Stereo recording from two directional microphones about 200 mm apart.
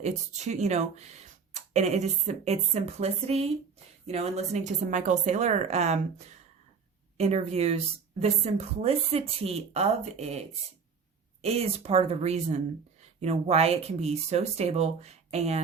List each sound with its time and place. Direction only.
0.0 s speech: 35° right (ahead or behind)
11.4 s speech: 30° right (ahead or behind)